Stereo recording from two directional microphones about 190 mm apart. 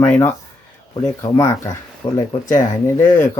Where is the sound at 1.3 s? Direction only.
15° left (ahead or behind).